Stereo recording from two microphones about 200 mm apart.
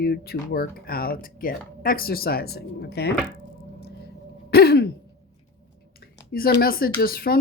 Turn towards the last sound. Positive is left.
turn(degrees=45)  # may be behind; listen again after turning